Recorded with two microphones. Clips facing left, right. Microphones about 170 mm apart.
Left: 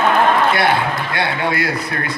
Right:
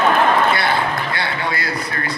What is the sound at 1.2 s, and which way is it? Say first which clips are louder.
Speech: left 4 dB; 55° left (ahead or behind).